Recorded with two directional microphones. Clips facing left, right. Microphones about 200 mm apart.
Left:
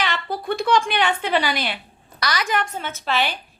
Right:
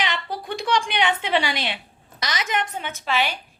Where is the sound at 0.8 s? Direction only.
20° right (ahead or behind).